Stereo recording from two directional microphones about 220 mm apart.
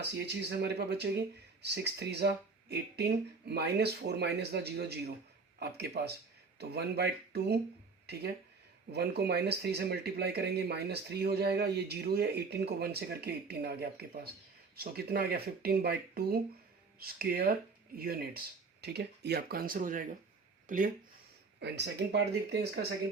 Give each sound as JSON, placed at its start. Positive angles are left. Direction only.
{"t": 0.0, "sound": "speech", "side_deg": -50}
{"t": 21.6, "sound": "speech", "side_deg": -50}